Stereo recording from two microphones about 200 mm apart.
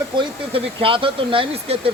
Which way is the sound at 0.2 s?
25° right (ahead or behind).